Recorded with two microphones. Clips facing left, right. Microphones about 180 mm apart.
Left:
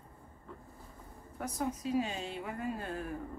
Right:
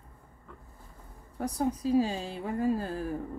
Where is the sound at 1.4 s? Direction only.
35° right (ahead or behind).